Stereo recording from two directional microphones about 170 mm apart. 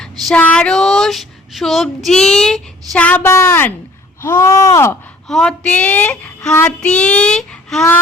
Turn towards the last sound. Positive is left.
turn(degrees=5)  # may be behind; listen again after turning